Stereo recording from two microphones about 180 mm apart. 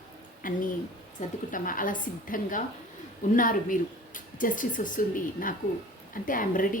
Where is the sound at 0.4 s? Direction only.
50° left (ahead or behind).